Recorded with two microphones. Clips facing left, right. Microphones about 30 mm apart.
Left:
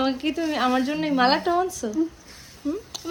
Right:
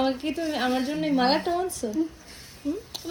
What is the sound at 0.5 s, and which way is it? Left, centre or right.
Speech, centre.